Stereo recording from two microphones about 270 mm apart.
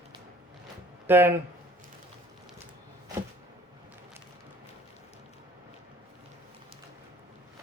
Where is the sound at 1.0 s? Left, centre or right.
Centre.